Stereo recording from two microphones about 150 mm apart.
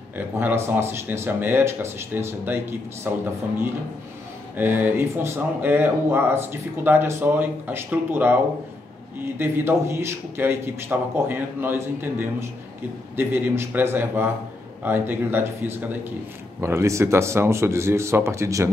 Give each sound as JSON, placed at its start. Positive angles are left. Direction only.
{"t": 0.4, "sound": "speech", "side_deg": -15}
{"t": 4.6, "sound": "speech", "side_deg": -15}